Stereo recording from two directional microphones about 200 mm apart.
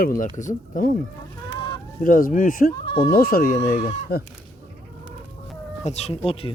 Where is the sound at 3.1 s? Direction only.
50° left (ahead or behind).